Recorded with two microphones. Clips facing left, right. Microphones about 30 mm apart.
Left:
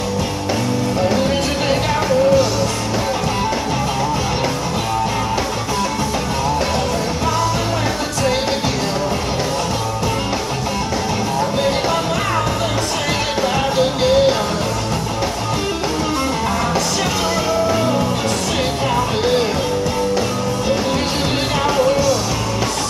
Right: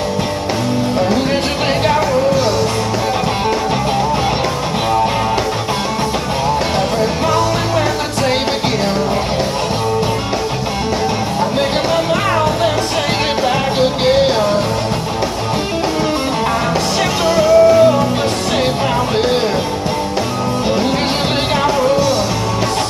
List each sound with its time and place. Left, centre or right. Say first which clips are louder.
1.3 s music: right 2 dB; right
13.7 s music: right 1 dB; right
17.4 s music: right 12 dB; centre